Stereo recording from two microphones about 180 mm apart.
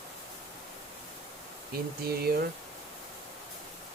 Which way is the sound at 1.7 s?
60° right (ahead or behind).